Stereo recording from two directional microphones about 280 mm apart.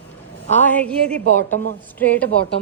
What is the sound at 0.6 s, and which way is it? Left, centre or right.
A woman's voice, centre.